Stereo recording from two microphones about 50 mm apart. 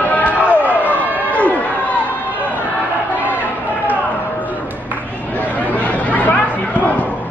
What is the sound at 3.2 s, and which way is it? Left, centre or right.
Chatter, right.